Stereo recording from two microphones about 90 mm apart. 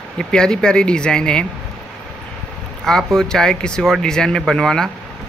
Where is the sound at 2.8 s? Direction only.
5° left (ahead or behind).